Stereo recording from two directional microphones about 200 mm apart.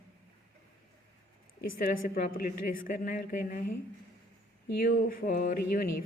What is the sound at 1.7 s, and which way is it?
A woman's voice, 45° left (ahead or behind).